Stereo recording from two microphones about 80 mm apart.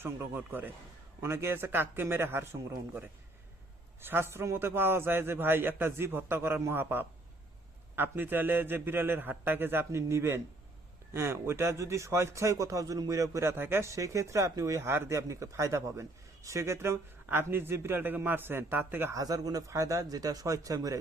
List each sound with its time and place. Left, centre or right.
0.0 s a man's voice: right
4.0 s a man's voice: right
19.1 s speech: right